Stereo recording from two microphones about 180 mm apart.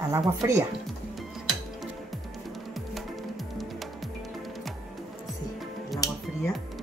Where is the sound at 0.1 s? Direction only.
15° right (ahead or behind).